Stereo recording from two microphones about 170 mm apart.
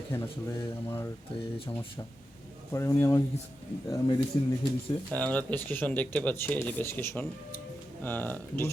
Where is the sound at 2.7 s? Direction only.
15° left (ahead or behind).